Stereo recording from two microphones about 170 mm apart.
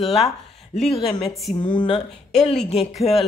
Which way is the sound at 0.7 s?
35° left (ahead or behind).